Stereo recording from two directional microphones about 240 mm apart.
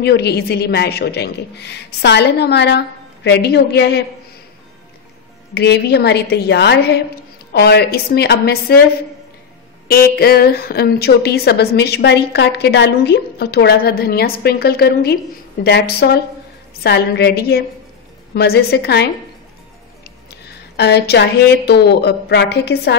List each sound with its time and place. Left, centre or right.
0.0 s a woman's voice: left
5.5 s a woman's voice: left
9.8 s a woman's voice: left